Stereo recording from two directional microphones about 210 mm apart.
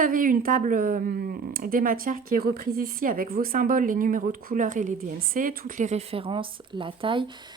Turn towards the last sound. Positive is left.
turn(degrees=-25)  # may be behind; listen again after turning